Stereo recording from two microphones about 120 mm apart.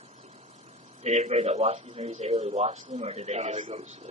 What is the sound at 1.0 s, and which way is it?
A man's voice, 65° right (ahead or behind).